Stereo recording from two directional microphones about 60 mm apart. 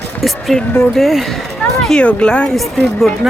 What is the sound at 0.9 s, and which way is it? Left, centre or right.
Speech, centre.